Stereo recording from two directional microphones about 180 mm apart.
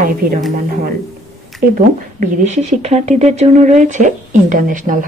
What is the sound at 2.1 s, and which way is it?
Speech, 40° right (ahead or behind).